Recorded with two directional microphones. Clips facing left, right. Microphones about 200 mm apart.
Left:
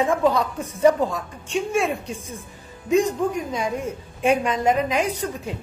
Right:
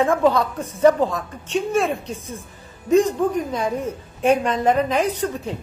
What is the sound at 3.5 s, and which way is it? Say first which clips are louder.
A woman's voice: right 2 dB; 10° left (ahead or behind).